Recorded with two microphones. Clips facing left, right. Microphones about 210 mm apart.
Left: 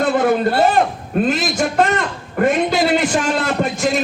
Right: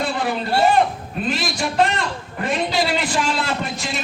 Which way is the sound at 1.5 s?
45° left (ahead or behind).